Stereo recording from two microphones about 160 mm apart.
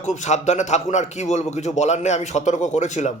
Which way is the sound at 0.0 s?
45° left (ahead or behind).